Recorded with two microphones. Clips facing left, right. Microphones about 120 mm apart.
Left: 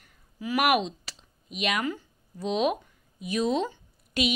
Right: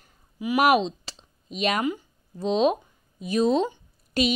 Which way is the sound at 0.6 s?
30° right (ahead or behind).